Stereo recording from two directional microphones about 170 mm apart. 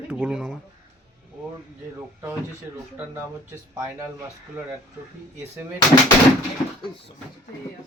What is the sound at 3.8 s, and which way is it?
Speech, 20° right (ahead or behind).